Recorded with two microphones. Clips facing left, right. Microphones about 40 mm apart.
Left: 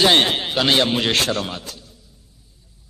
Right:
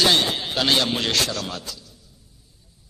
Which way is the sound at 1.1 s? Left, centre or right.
Left.